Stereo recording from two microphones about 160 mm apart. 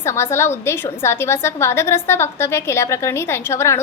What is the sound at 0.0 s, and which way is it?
A woman's voice, 15° left (ahead or behind).